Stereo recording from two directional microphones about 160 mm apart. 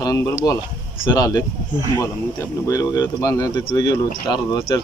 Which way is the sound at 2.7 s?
25° left (ahead or behind).